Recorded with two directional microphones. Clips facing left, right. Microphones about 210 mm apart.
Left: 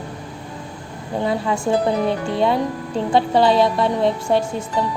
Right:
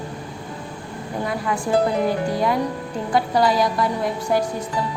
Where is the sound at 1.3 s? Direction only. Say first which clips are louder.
Left 2 dB; 25° left (ahead or behind).